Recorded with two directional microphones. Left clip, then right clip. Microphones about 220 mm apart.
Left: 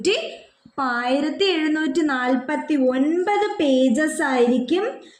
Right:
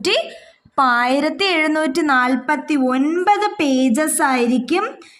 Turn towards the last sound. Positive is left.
turn(degrees=-50)  # may be behind; listen again after turning